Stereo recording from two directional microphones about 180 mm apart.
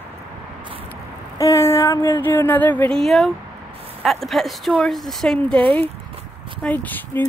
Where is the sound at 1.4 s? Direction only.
15° left (ahead or behind).